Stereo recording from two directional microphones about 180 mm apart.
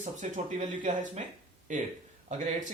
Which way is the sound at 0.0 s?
45° right (ahead or behind).